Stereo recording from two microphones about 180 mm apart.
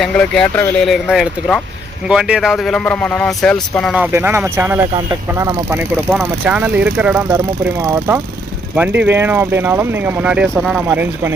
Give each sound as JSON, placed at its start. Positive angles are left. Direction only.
{"t": 0.0, "sound": "speech", "side_deg": 5}
{"t": 3.9, "sound": "speech", "side_deg": -10}
{"t": 7.3, "sound": "speech", "side_deg": -20}